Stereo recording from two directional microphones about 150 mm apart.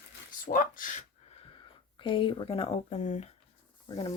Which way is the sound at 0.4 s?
65° left (ahead or behind).